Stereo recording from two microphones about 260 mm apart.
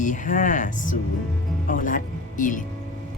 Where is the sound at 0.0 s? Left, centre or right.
Left.